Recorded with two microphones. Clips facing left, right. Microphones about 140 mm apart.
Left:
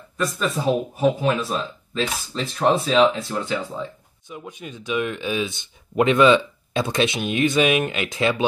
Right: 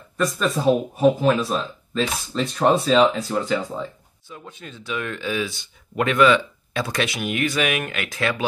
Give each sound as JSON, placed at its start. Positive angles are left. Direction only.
{"t": 0.2, "sound": "speech", "side_deg": 0}
{"t": 4.3, "sound": "speech", "side_deg": 15}